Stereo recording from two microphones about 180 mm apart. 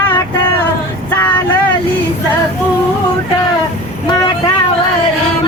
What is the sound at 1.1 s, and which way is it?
Vehicle, 10° left (ahead or behind).